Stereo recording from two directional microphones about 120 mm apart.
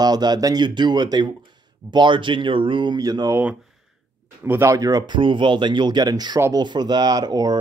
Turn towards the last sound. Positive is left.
turn(degrees=-35)  # may be behind; listen again after turning